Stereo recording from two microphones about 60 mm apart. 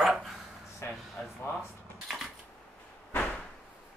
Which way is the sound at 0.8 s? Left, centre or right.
Left.